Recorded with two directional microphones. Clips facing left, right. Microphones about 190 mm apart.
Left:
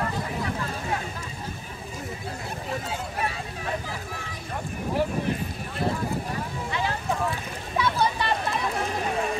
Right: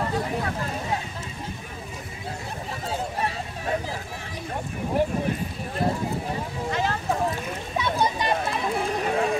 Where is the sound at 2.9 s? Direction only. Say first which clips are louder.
Right 2 dB; 35° right (ahead or behind).